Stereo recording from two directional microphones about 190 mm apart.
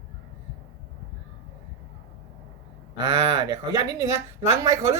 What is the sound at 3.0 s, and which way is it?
Speech, 20° right (ahead or behind).